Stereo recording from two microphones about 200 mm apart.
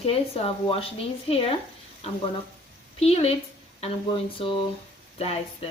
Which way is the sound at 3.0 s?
30° left (ahead or behind).